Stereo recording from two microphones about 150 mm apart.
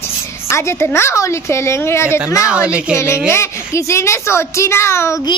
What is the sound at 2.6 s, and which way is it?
Speech, 5° right (ahead or behind).